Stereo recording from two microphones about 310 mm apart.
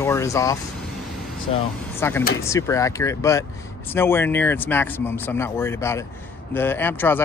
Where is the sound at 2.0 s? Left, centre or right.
Centre.